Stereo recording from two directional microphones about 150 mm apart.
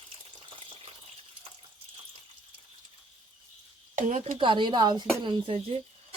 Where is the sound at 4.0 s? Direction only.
55° right (ahead or behind).